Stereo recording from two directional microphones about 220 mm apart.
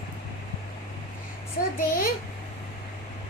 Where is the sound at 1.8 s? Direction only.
40° left (ahead or behind).